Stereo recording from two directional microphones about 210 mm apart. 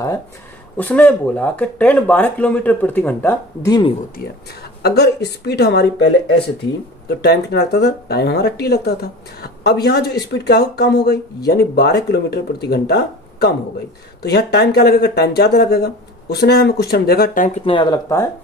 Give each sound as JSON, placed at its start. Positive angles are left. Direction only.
{"t": 0.7, "sound": "speech", "side_deg": 10}
{"t": 4.8, "sound": "speech", "side_deg": 50}
{"t": 17.6, "sound": "speech", "side_deg": 20}